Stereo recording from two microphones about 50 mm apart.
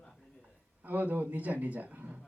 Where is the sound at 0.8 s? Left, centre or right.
Right.